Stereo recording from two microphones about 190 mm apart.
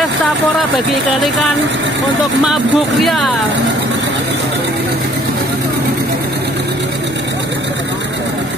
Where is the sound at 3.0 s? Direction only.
Centre (ahead or behind).